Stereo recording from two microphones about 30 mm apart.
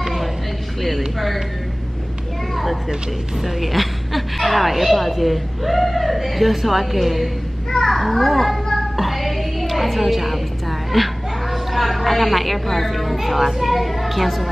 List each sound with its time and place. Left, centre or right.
0.8 s speech: centre
2.5 s a sound: centre
3.3 s a woman's voice: centre
8.7 s music: centre
10.9 s a woman's voice: centre